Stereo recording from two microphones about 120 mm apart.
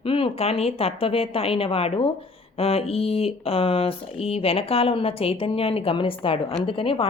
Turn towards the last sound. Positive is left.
turn(degrees=50)  # may be behind; listen again after turning